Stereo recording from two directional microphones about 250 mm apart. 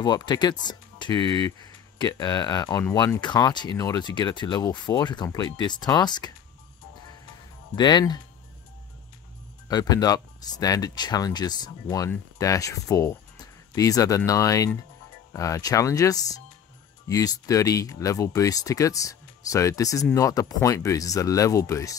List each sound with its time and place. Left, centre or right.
0.0 s speech: centre
7.7 s speech: centre
9.7 s speech: centre